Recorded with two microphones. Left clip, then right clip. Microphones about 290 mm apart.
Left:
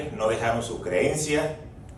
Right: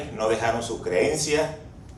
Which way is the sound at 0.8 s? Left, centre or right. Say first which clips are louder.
Right 2 dB; right.